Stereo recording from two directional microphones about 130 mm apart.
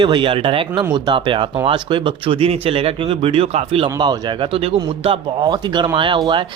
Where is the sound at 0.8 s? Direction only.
35° right (ahead or behind); by 3.8 s 50° right (ahead or behind).